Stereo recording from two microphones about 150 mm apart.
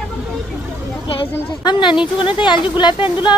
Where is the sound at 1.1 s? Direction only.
35° left (ahead or behind).